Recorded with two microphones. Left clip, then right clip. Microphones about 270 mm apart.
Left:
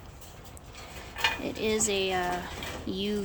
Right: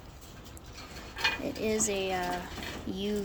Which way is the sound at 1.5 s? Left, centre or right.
Centre.